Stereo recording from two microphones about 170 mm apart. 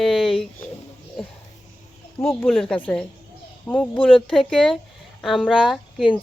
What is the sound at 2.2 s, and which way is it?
Speech, 5° left (ahead or behind).